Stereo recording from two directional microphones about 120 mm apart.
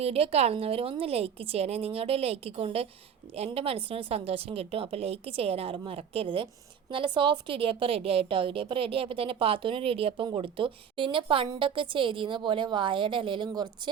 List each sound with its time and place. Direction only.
0.0 s a woman's voice: 55° right (ahead or behind); by 13.9 s 35° right (ahead or behind)